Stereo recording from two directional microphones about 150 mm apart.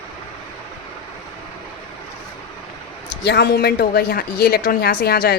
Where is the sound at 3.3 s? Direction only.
90° left.